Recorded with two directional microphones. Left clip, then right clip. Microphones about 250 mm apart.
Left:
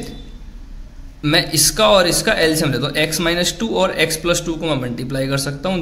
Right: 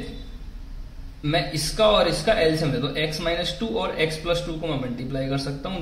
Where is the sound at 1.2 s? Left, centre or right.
Left.